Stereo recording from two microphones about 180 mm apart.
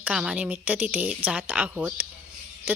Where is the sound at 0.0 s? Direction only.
5° right (ahead or behind).